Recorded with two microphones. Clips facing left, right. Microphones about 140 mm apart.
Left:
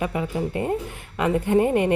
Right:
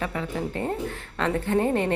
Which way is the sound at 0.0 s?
10° left (ahead or behind).